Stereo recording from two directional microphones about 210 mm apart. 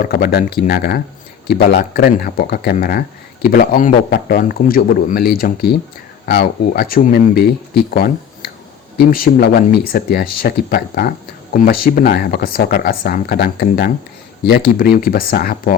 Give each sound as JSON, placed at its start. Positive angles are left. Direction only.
{"t": 0.0, "sound": "speech", "side_deg": 45}